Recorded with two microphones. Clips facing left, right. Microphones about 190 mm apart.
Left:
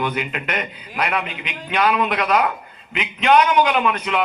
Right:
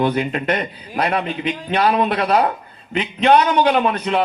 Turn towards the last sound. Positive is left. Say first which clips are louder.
# right 3 dB
turn(degrees=-35)  # may be behind; listen again after turning